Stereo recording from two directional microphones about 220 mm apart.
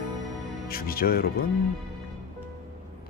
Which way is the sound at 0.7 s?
40° left (ahead or behind).